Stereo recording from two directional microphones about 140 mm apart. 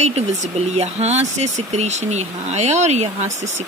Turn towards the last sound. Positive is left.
turn(degrees=-55)  # may be behind; listen again after turning